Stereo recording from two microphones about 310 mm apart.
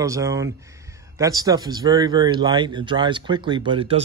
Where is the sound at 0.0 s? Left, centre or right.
Centre.